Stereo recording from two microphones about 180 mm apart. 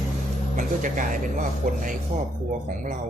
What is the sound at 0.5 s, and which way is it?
Speech, 45° right (ahead or behind).